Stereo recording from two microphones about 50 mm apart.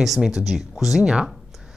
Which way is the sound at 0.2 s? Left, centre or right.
Centre.